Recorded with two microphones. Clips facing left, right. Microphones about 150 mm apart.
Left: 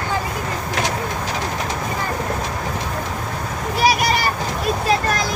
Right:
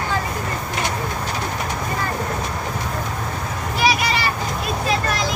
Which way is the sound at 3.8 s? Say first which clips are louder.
Left 2 dB; 45° left (ahead or behind).